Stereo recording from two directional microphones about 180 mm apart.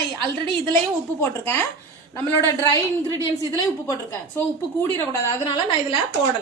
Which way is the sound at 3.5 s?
20° left (ahead or behind).